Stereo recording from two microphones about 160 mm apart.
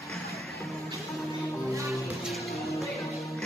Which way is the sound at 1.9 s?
Centre (ahead or behind).